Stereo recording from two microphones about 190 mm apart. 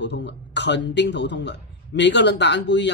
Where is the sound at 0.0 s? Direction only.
65° left (ahead or behind).